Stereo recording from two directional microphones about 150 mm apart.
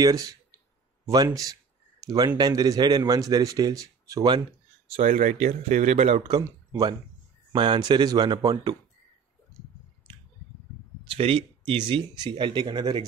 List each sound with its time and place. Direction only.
0.0 s speech: 25° right (ahead or behind)
4.9 s speech: 55° right (ahead or behind)
7.5 s speech: 30° right (ahead or behind)
11.1 s speech: 40° right (ahead or behind)